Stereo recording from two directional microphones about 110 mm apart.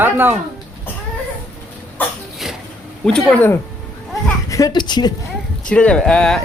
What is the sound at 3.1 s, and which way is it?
Speech, 10° left (ahead or behind).